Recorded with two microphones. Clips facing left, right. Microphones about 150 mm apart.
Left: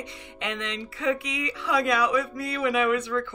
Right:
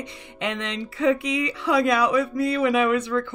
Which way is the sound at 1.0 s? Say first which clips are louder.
Right 6 dB; 30° right (ahead or behind).